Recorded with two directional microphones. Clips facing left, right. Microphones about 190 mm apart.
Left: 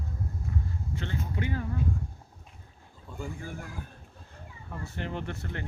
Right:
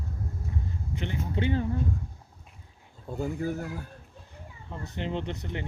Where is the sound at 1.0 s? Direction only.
20° right (ahead or behind).